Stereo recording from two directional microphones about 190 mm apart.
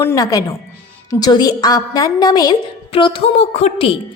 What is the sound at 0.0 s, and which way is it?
A woman's voice, 15° left (ahead or behind).